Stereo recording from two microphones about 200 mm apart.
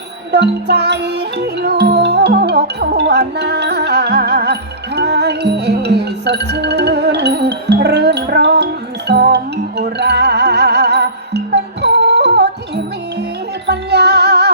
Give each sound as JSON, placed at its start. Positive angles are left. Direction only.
{"t": 0.3, "sound": "music", "side_deg": -55}